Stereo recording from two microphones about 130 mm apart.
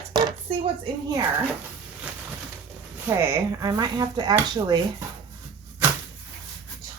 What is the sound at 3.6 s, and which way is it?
A woman's voice, 30° right (ahead or behind).